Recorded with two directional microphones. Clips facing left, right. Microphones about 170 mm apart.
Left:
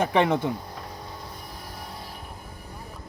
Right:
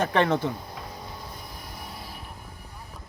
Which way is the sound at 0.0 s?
15° left (ahead or behind).